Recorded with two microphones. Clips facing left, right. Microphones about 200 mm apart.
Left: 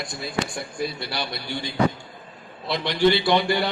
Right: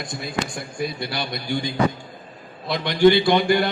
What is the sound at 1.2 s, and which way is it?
Speech, 45° right (ahead or behind).